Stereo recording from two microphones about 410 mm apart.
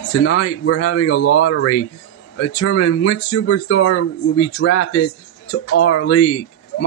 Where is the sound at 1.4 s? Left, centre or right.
Left.